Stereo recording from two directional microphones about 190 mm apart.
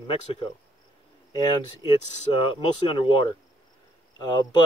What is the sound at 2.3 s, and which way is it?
Speech, 25° left (ahead or behind).